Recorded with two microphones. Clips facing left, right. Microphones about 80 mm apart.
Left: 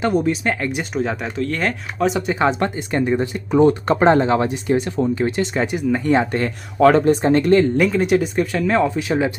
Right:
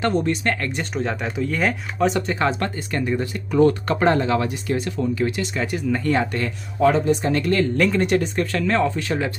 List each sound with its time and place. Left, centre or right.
0.0 s speech: centre
2.2 s speech: centre; by 5.7 s left
5.7 s speech: centre
7.1 s speech: left
7.9 s speech: centre